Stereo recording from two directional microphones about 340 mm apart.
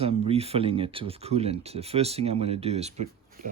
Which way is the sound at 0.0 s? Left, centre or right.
Centre.